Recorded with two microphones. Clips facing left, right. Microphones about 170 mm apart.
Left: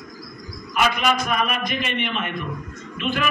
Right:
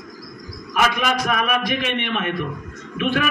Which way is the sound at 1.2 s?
70° right (ahead or behind).